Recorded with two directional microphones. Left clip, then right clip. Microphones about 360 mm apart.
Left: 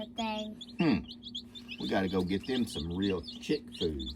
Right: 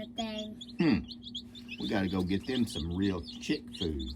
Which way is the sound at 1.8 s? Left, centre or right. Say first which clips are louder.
Left 2 dB; centre.